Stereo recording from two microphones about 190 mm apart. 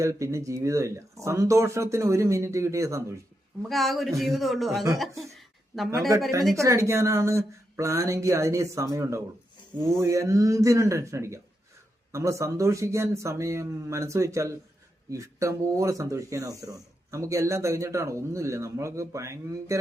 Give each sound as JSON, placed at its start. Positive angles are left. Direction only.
{"t": 0.0, "sound": "speech", "side_deg": -15}
{"t": 3.6, "sound": "a man's voice", "side_deg": 0}
{"t": 6.6, "sound": "speech", "side_deg": -15}